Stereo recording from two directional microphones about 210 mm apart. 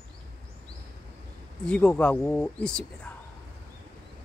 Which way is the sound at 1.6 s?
5° left (ahead or behind).